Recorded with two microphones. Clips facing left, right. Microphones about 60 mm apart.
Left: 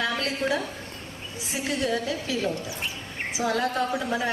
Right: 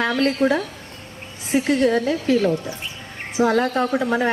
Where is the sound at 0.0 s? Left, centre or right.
Right.